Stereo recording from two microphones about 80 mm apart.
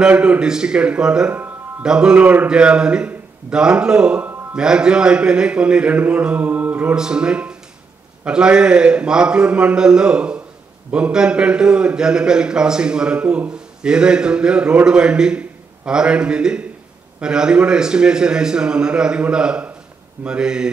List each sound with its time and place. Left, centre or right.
0.0 s a man's voice: centre
1.3 s music: right
1.9 s a man's voice: centre